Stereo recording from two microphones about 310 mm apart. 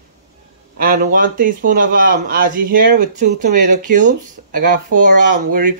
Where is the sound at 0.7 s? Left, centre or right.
Right.